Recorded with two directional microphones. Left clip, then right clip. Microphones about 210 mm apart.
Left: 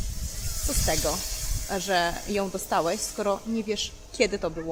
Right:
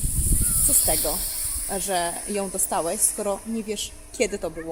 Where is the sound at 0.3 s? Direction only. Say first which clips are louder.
Right 4 dB; 30° left (ahead or behind).